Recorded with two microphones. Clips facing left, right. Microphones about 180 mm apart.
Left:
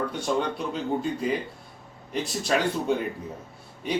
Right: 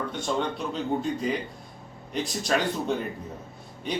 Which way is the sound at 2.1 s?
5° left (ahead or behind).